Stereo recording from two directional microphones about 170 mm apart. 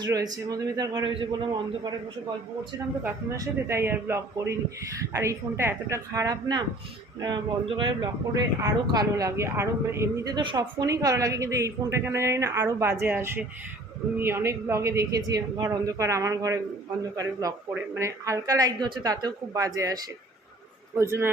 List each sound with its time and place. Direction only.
0.0 s speech: 20° right (ahead or behind)
3.0 s speech: 10° right (ahead or behind)
17.9 s speech: 15° right (ahead or behind)